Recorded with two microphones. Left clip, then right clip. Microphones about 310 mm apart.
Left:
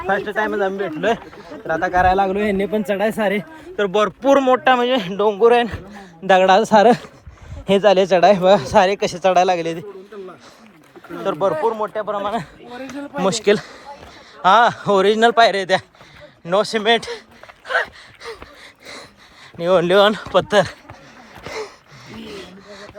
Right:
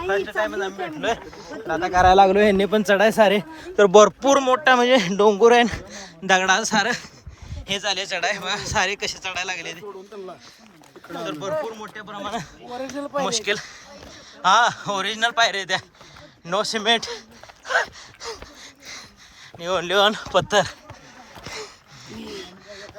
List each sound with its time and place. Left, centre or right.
0.2 s speech: centre
2.0 s a man's voice: right; by 9.8 s centre
11.7 s a man's voice: centre
19.5 s a man's voice: centre
21.4 s a sound: centre